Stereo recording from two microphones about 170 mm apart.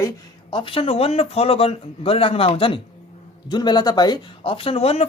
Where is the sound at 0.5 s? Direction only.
30° left (ahead or behind).